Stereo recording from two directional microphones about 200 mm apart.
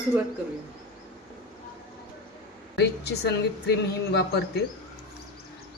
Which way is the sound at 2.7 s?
55° left (ahead or behind).